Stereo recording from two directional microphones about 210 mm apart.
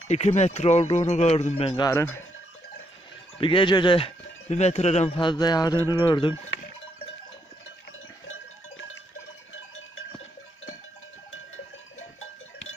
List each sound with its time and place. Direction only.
0.1 s speech: 30° left (ahead or behind); by 2.2 s 10° left (ahead or behind)
3.3 s speech: 25° left (ahead or behind)